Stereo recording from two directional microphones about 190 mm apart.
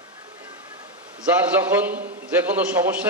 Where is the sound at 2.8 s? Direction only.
20° right (ahead or behind).